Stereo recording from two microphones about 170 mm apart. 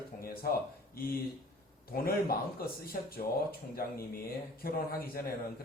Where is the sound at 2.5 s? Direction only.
60° left (ahead or behind).